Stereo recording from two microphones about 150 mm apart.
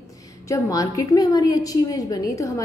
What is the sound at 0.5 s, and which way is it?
A woman's voice, 20° left (ahead or behind).